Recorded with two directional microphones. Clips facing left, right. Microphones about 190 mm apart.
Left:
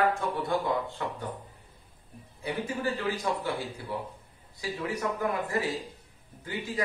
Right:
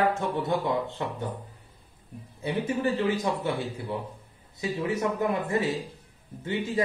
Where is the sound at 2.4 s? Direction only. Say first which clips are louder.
Right 4 dB; 25° right (ahead or behind).